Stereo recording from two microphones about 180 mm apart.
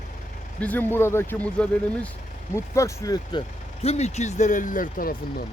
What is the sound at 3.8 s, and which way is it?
Speech, 35° left (ahead or behind).